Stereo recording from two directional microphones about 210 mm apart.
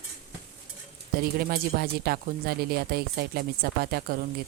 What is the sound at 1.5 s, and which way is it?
Speech, 45° right (ahead or behind).